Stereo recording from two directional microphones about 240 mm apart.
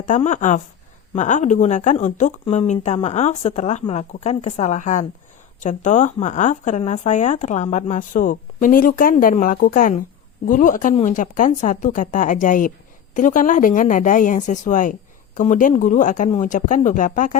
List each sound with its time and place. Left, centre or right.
0.0 s speech: left